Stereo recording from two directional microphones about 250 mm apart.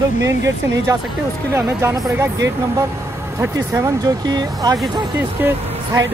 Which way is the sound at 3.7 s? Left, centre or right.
Centre.